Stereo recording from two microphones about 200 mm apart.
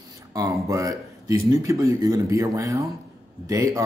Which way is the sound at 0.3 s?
15° right (ahead or behind).